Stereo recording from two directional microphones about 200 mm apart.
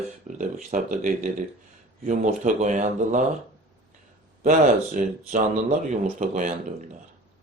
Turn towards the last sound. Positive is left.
turn(degrees=-40)  # may be behind; listen again after turning